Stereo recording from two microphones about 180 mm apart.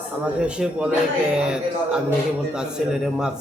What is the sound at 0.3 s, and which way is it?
Speech, 5° right (ahead or behind).